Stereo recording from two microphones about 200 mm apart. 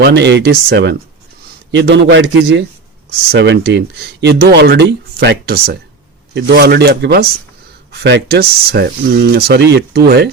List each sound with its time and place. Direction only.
0.0 s speech: 60° right (ahead or behind)